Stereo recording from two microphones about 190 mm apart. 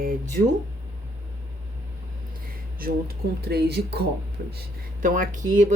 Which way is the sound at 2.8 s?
55° right (ahead or behind).